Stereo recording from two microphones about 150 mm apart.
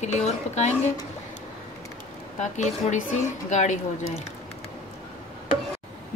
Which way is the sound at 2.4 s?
55° left (ahead or behind).